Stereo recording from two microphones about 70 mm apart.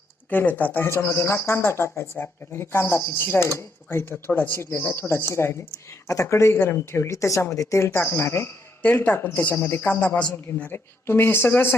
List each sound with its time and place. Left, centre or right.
0.3 s speech: left
8.8 s a woman's voice: left
10.7 s speech: left